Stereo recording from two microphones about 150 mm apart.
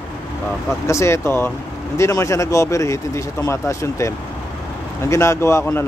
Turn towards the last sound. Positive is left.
turn(degrees=15)  # may be behind; listen again after turning